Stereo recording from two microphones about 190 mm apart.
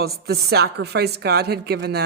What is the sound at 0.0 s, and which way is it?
A woman's voice, 55° right (ahead or behind).